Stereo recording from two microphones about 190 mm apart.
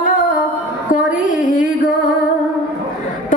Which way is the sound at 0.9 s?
45° left (ahead or behind).